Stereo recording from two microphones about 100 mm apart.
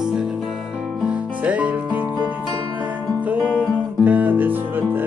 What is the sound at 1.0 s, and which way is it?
Music, 15° right (ahead or behind).